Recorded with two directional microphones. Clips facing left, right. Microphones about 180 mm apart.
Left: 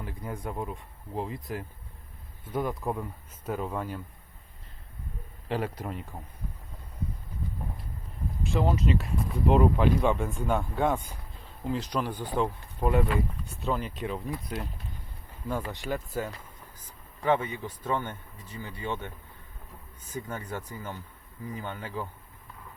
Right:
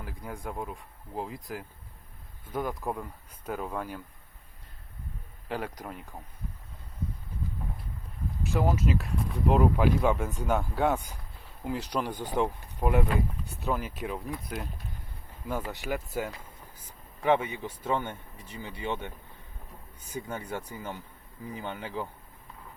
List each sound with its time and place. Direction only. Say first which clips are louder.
0.0 s speech: left 2 dB; centre (ahead or behind)
5.5 s speech: left 3 dB; 5° left (ahead or behind)
8.5 s speech: left 1 dB; 5° right (ahead or behind)
20.1 s speech: even; 10° right (ahead or behind)